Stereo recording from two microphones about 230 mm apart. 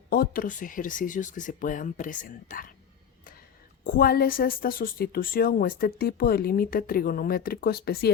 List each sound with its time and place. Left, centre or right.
0.1 s speech: left
3.8 s speech: left